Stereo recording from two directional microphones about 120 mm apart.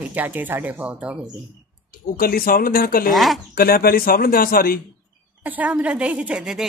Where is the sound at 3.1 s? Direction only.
Centre (ahead or behind).